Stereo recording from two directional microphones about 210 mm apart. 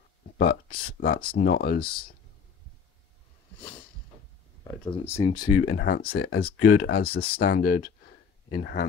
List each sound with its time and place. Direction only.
0.4 s speech: 45° left (ahead or behind)
4.6 s speech: 20° left (ahead or behind)
5.7 s speech: 50° left (ahead or behind)